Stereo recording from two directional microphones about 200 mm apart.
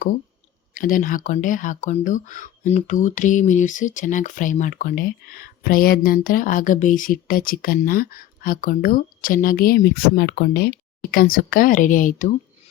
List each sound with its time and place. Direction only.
0.7 s speech: 45° left (ahead or behind)